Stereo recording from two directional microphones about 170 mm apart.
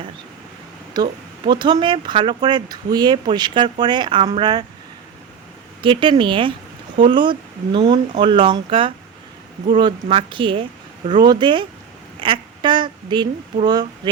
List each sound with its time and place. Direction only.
1.0 s speech: 25° right (ahead or behind)
5.8 s speech: 30° right (ahead or behind)